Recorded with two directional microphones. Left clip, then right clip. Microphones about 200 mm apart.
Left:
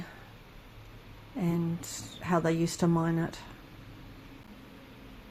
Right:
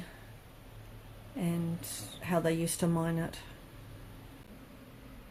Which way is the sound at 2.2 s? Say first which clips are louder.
Left 3 dB; 20° left (ahead or behind).